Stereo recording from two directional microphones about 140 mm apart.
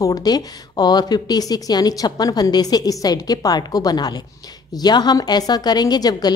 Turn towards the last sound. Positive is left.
turn(degrees=30)  # may be behind; listen again after turning